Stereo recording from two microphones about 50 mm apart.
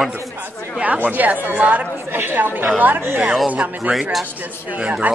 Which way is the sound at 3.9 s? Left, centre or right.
Centre.